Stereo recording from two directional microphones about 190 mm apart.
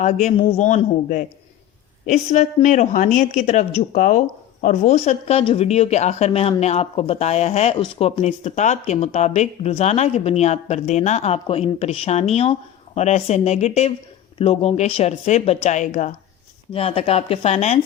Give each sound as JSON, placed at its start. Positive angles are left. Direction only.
{"t": 0.0, "sound": "speech", "side_deg": 40}